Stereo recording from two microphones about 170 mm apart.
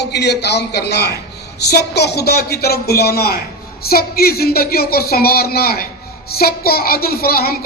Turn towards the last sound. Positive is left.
turn(degrees=60)  # may be behind; listen again after turning